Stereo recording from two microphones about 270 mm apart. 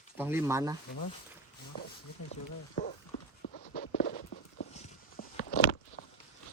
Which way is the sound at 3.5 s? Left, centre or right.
Left.